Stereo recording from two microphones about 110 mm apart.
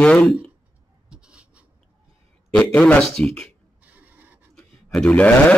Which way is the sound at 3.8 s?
15° right (ahead or behind).